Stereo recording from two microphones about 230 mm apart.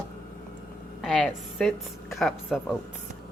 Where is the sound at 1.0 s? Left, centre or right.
Centre.